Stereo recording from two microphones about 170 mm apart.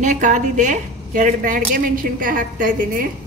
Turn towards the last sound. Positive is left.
turn(degrees=-55)  # may be behind; listen again after turning